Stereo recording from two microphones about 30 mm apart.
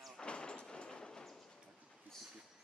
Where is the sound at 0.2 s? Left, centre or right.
Left.